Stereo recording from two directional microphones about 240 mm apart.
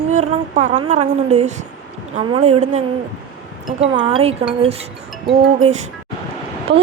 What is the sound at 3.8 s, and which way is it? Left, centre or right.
A woman's voice, centre.